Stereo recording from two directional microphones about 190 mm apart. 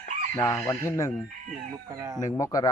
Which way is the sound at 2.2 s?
20° left (ahead or behind).